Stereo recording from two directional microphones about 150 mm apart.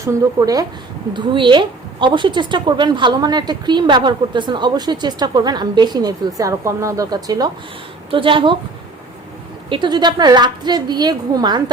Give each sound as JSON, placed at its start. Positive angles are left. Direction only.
{"t": 0.0, "sound": "a woman's voice", "side_deg": -20}
{"t": 9.6, "sound": "a woman's voice", "side_deg": -30}